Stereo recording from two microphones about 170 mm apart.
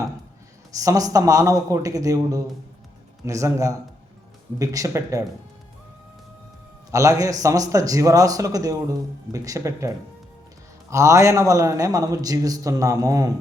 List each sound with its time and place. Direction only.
0.8 s speech: 20° right (ahead or behind)
6.9 s speech: 20° right (ahead or behind)